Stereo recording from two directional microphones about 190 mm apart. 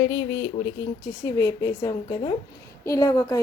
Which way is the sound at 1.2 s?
15° left (ahead or behind).